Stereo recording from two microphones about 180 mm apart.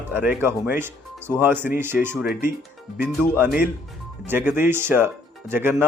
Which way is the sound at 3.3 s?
10° right (ahead or behind).